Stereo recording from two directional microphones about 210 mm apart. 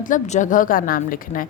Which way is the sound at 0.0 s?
35° left (ahead or behind).